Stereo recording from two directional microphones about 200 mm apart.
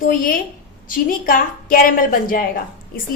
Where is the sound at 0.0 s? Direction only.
45° left (ahead or behind).